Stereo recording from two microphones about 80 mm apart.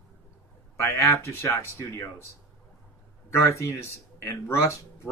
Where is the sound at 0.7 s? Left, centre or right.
Left.